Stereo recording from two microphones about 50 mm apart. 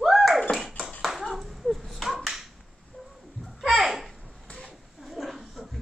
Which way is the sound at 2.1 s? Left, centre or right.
Centre.